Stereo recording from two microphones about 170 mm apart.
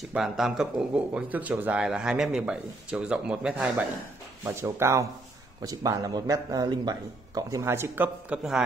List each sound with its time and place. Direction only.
0.1 s a man's voice: 5° right (ahead or behind)